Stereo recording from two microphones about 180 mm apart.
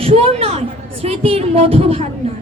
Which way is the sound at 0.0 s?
35° right (ahead or behind).